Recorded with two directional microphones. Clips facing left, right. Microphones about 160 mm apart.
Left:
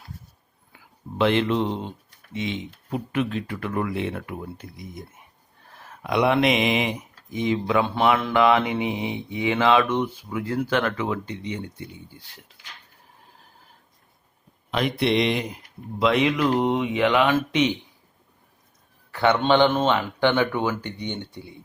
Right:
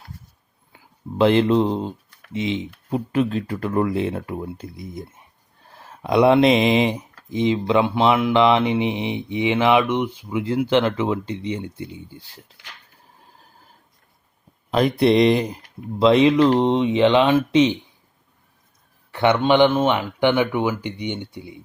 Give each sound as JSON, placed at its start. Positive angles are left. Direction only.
{"t": 1.2, "sound": "speech", "side_deg": -35}
{"t": 14.7, "sound": "speech", "side_deg": -35}
{"t": 19.1, "sound": "speech", "side_deg": -15}